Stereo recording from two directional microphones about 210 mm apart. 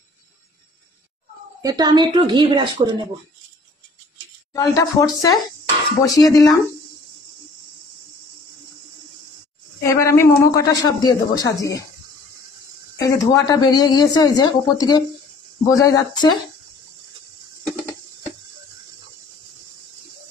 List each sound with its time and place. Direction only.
1.6 s speech: 20° right (ahead or behind)
4.6 s speech: 15° left (ahead or behind)
9.8 s speech: 15° left (ahead or behind)
13.0 s speech: 15° left (ahead or behind)